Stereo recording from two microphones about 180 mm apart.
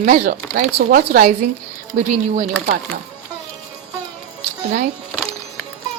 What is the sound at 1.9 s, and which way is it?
Speech, 40° right (ahead or behind).